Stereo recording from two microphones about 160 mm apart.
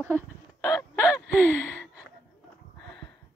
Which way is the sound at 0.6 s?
20° left (ahead or behind).